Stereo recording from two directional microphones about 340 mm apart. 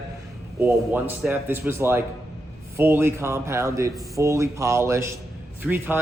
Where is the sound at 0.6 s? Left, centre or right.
Centre.